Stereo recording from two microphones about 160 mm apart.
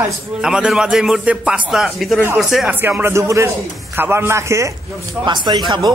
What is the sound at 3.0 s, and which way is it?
A man's voice, 15° right (ahead or behind).